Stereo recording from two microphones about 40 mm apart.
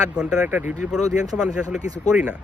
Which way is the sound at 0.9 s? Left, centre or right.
Centre.